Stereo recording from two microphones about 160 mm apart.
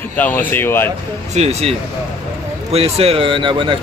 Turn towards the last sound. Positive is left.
turn(degrees=-30)  # may be behind; listen again after turning